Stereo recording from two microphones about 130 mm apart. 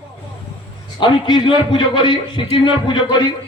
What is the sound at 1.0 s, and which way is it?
A man's voice, 35° left (ahead or behind).